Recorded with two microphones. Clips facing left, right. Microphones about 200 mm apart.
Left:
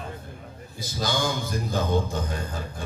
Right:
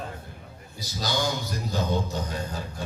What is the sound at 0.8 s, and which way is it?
Speech, 50° left (ahead or behind).